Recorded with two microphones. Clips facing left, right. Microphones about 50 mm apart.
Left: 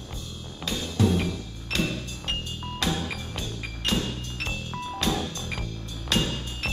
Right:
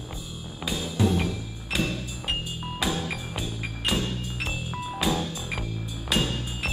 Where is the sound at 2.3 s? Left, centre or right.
Centre.